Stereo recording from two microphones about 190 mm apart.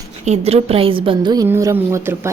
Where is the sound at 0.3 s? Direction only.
30° right (ahead or behind).